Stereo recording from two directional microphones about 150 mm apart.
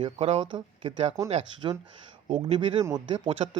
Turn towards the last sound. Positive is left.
turn(degrees=-35)  # may be behind; listen again after turning